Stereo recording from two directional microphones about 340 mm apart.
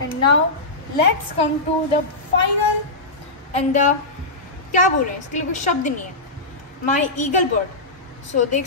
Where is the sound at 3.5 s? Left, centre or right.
Left.